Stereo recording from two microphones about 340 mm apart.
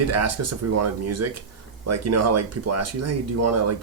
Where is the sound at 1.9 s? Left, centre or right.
Right.